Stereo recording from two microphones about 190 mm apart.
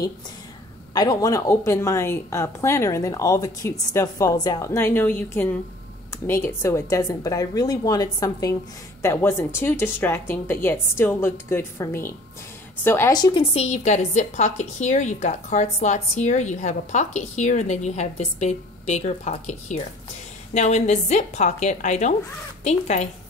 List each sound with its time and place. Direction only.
0.9 s a woman's voice: 20° left (ahead or behind); by 23.0 s 35° left (ahead or behind)